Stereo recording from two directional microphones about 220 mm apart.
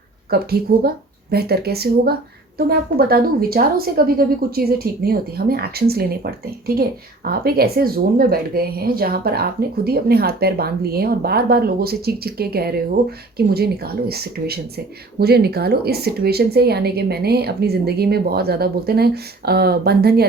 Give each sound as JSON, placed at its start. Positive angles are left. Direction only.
{"t": 0.3, "sound": "a woman's voice", "side_deg": -45}